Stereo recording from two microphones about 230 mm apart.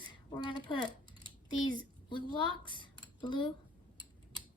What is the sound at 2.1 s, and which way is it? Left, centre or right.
Speech, left.